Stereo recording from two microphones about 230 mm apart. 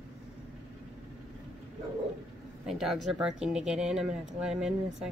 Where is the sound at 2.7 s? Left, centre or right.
Centre.